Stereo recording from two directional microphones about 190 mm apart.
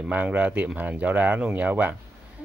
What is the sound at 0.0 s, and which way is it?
Speech, 10° right (ahead or behind).